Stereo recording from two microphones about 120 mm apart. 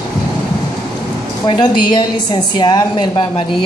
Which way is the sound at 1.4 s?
40° left (ahead or behind).